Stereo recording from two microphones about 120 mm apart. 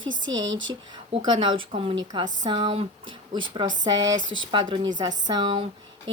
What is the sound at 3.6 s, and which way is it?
Speech, 90° right.